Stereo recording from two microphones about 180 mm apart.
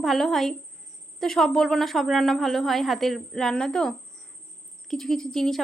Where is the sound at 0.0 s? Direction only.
Centre (ahead or behind).